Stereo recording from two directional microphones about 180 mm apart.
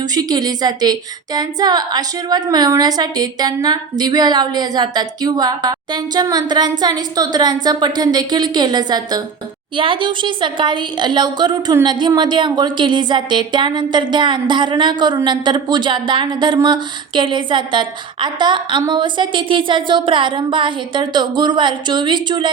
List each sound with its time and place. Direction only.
0.0 s a woman's voice: 20° right (ahead or behind)